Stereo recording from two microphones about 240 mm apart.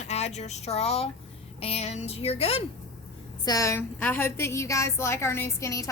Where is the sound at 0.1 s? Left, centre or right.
Left.